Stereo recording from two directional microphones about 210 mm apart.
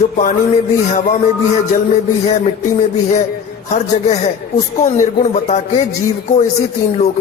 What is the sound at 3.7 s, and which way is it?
A man's voice, 30° left (ahead or behind).